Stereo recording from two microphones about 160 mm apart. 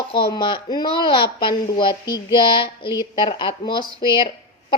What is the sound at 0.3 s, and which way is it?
Speech, 30° left (ahead or behind).